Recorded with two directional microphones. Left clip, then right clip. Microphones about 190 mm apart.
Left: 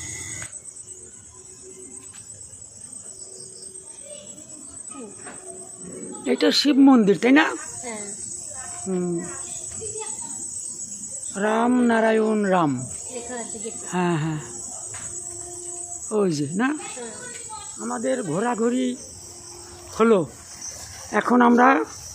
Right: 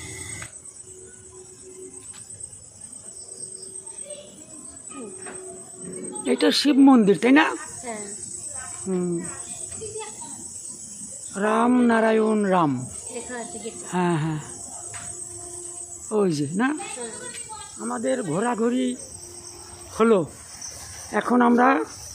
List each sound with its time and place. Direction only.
6.2 s speech: centre (ahead or behind)
8.8 s speech: centre (ahead or behind)
11.3 s speech: centre (ahead or behind)
13.8 s speech: centre (ahead or behind)
16.1 s speech: centre (ahead or behind)
17.7 s speech: centre (ahead or behind)
20.0 s speech: 5° left (ahead or behind)